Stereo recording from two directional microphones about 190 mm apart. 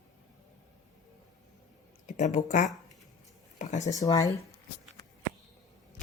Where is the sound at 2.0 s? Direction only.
40° left (ahead or behind).